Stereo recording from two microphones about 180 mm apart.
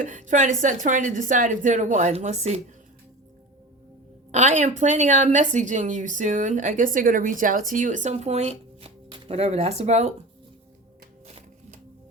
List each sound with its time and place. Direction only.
0.0 s a woman's voice: 45° right (ahead or behind)
4.3 s a woman's voice: 40° right (ahead or behind)